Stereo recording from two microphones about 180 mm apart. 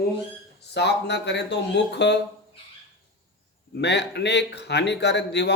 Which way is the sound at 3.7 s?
70° left (ahead or behind).